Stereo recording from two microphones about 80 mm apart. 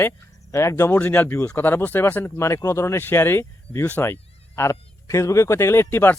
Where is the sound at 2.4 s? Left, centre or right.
Left.